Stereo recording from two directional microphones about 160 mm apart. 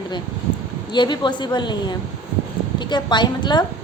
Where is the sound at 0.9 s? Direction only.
25° left (ahead or behind).